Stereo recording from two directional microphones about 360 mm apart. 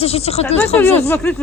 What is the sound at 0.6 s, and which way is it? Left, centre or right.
Speech, centre.